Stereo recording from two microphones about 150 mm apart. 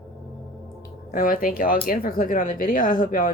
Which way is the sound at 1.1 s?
70° left (ahead or behind).